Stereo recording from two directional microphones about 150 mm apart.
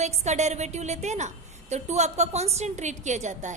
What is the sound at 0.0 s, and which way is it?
A woman's voice, 45° right (ahead or behind).